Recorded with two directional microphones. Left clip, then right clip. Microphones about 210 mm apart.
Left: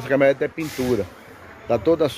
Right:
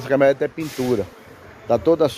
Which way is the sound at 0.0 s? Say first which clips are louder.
Right 1 dB; 10° right (ahead or behind).